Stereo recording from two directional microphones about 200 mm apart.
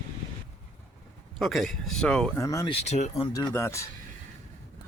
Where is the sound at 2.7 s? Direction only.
35° left (ahead or behind).